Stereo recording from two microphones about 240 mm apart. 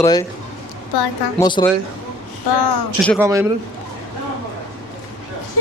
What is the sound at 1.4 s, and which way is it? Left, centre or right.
Speech, centre.